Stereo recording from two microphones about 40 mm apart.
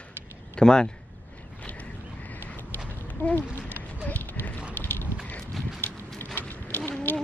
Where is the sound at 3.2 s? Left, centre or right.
Left.